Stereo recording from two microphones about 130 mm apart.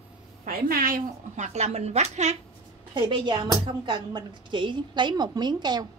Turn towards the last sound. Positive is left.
turn(degrees=-35)  # may be behind; listen again after turning